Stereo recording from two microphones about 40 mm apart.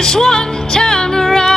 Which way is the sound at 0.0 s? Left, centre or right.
Centre.